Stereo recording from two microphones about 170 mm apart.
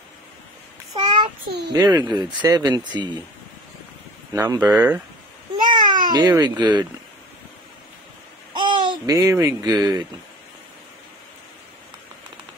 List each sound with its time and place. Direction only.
0.9 s child singing: 30° right (ahead or behind)
1.7 s speech: 20° right (ahead or behind)
4.3 s speech: 20° right (ahead or behind)
4.6 s speech: 10° right (ahead or behind)
5.6 s baby cry: 25° right (ahead or behind)
8.6 s speech: 25° right (ahead or behind)